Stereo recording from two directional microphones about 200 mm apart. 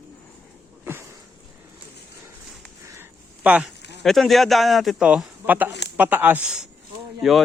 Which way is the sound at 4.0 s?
Centre (ahead or behind).